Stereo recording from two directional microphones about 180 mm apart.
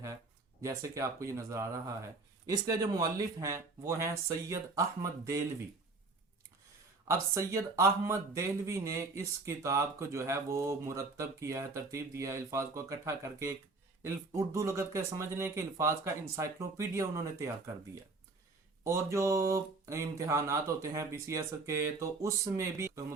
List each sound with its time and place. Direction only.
0.6 s speech: 15° right (ahead or behind)
7.1 s speech: 15° right (ahead or behind)
18.9 s speech: 15° right (ahead or behind)